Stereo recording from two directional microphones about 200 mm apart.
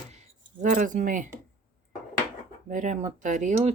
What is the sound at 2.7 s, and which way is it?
A woman's voice, 40° right (ahead or behind).